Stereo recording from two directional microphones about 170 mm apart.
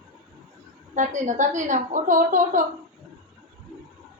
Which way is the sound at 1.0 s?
45° right (ahead or behind).